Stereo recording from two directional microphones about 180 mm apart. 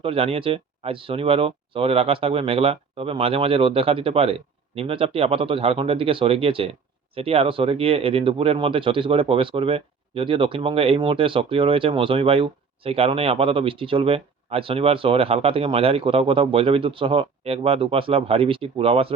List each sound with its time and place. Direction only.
0.0 s speech: 30° right (ahead or behind)